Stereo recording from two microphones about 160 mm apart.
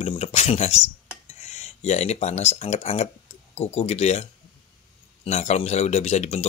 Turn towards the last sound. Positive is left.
turn(degrees=45)  # may be behind; listen again after turning